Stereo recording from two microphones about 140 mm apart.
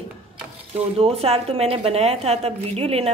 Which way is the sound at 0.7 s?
45° right (ahead or behind).